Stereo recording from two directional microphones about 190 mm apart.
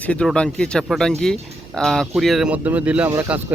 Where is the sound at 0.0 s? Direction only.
5° left (ahead or behind).